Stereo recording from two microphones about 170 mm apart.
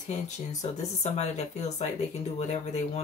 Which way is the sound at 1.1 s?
40° left (ahead or behind).